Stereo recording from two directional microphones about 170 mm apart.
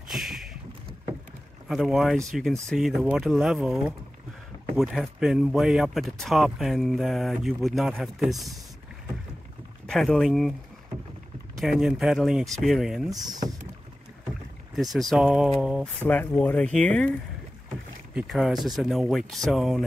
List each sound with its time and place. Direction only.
0.1 s a sound: centre (ahead or behind)
1.7 s speech: centre (ahead or behind)
9.8 s speech: centre (ahead or behind)
11.6 s speech: centre (ahead or behind)
13.1 s speech: 25° right (ahead or behind)
14.8 s speech: centre (ahead or behind)
16.1 s speech: 10° left (ahead or behind)